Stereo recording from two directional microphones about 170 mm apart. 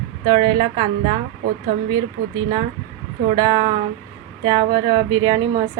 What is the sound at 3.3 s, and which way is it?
Speech, 20° right (ahead or behind).